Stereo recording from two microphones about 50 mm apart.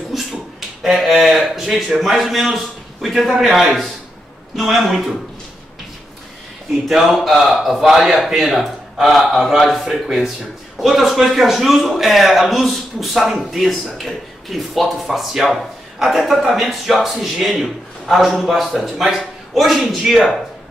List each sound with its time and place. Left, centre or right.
0.1 s a sound: centre
0.9 s a man's voice: centre
6.9 s a man's voice: centre